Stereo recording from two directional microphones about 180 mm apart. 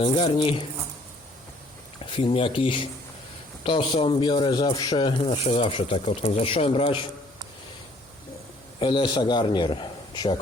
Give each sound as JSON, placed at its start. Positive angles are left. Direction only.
{"t": 0.0, "sound": "speech", "side_deg": 30}
{"t": 2.0, "sound": "speech", "side_deg": 30}
{"t": 8.8, "sound": "speech", "side_deg": 30}